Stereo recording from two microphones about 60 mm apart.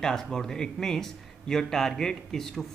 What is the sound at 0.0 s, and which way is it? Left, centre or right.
Speech, centre.